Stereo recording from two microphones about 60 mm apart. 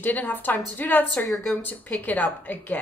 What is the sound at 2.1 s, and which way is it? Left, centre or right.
Speech, left.